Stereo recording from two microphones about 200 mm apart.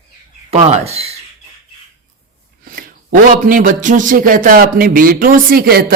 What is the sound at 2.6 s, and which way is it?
A man's voice, 45° right (ahead or behind).